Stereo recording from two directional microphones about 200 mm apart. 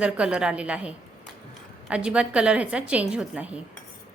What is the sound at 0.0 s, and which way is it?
A woman's voice, 5° right (ahead or behind).